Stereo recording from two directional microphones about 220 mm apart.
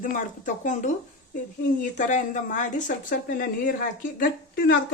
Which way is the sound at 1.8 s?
35° left (ahead or behind).